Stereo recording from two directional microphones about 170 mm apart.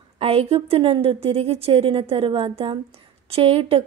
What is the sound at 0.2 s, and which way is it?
A woman's voice, 35° right (ahead or behind).